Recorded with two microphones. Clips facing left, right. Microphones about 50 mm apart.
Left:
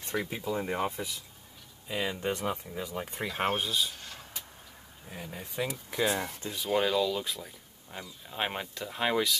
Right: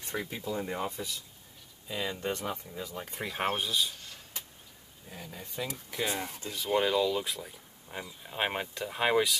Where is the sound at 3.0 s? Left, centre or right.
Centre.